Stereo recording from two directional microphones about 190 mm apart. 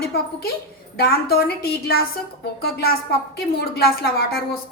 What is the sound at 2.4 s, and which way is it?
A woman's voice, 55° left (ahead or behind).